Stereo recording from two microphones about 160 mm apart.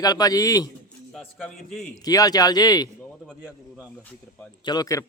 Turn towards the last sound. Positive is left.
turn(degrees=20)  # may be behind; listen again after turning